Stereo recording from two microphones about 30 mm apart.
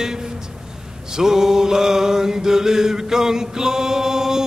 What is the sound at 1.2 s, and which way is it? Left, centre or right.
Chant, centre.